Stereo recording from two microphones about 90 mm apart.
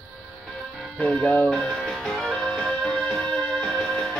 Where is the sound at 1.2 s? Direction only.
15° left (ahead or behind).